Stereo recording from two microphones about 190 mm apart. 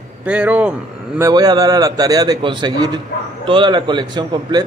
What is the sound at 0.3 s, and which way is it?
A man's voice, 10° right (ahead or behind).